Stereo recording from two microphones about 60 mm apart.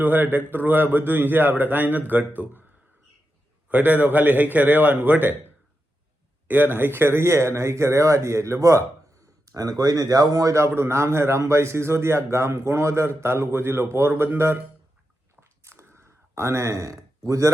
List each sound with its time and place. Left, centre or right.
0.0 s a man's voice: right
3.7 s a man's voice: right
6.5 s a man's voice: right
9.5 s a man's voice: right
15.4 s a sound: right